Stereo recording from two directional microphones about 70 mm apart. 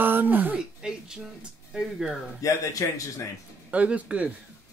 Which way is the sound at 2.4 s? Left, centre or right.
Left.